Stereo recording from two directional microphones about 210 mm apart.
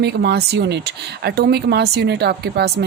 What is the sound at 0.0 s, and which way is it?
A woman's voice, 55° right (ahead or behind).